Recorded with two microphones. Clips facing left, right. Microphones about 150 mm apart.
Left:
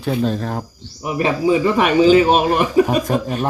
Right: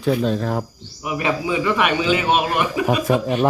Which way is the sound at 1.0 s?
35° left (ahead or behind).